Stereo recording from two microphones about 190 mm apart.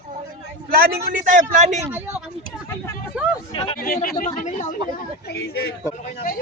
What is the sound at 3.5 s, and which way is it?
Speech, 25° left (ahead or behind).